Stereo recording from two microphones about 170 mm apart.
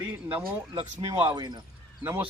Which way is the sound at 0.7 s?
30° right (ahead or behind).